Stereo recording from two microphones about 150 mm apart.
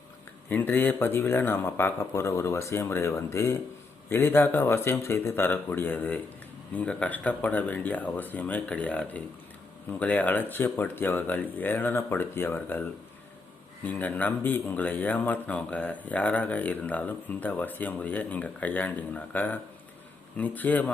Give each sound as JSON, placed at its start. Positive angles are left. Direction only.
{"t": 0.5, "sound": "speech", "side_deg": 15}